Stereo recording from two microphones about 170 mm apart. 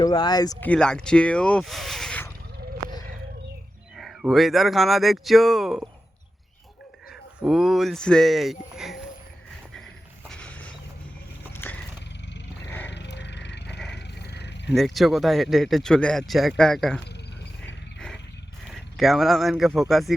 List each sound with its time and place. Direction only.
0.0 s speech: 25° left (ahead or behind)
0.6 s speech: 5° left (ahead or behind)
3.9 s speech: centre (ahead or behind)
7.4 s speech: 5° right (ahead or behind)
10.2 s a sound: 5° left (ahead or behind)
12.6 s roaring cats: 10° left (ahead or behind)
12.9 s a sound: 90° left
13.9 s wild animals: 75° left (ahead or behind)
14.7 s speech: centre (ahead or behind)
18.7 s speech: centre (ahead or behind)